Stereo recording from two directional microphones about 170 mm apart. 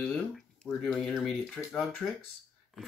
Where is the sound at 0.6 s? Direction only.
5° left (ahead or behind).